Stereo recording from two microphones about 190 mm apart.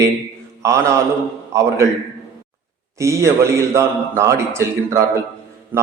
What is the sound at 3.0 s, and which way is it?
A man's voice, 15° right (ahead or behind).